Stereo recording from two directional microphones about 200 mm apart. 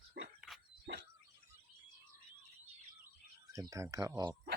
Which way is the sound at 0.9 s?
55° right (ahead or behind).